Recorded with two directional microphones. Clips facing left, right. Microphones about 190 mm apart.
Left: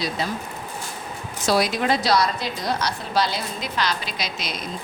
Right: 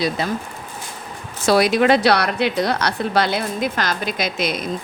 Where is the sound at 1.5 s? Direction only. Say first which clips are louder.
Right 6 dB; 65° right (ahead or behind).